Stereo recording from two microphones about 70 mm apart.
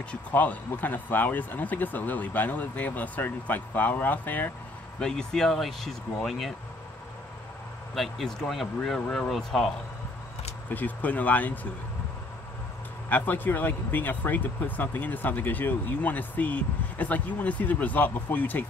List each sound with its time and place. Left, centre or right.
0.1 s speech: left
5.0 s speech: centre
7.9 s speech: centre
10.7 s speech: left
13.1 s speech: left